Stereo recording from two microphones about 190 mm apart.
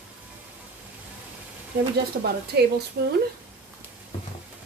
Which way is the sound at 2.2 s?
55° right (ahead or behind).